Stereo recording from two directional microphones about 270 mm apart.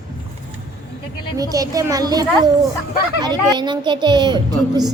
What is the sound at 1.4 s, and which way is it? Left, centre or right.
A child's voice, centre.